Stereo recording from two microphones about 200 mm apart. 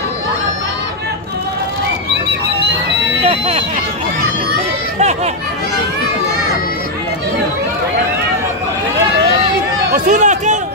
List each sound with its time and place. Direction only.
3.3 s speech: 35° right (ahead or behind)
9.9 s run: 40° right (ahead or behind)